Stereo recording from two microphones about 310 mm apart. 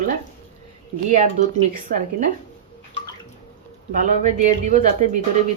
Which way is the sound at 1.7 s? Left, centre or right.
Right.